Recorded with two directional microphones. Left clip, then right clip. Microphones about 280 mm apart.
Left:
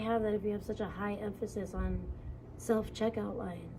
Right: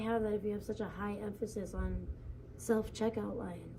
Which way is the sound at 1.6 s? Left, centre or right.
Right.